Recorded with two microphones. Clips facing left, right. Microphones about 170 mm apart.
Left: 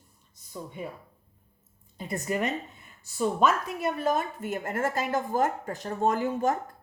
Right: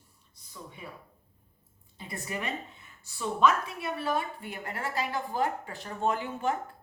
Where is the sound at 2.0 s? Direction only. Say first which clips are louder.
Left 8 dB; 45° left (ahead or behind).